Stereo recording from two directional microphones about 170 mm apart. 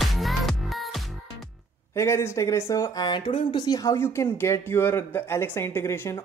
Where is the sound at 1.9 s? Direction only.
15° left (ahead or behind).